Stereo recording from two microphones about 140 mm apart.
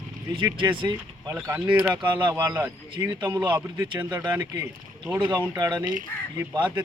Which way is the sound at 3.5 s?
15° right (ahead or behind).